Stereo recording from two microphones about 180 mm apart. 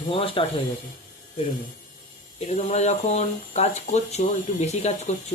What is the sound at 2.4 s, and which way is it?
Speech, 40° left (ahead or behind).